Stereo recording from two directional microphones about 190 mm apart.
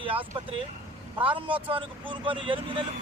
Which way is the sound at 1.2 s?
30° right (ahead or behind).